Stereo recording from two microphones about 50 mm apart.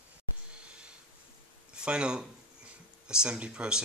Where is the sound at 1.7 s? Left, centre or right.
Centre.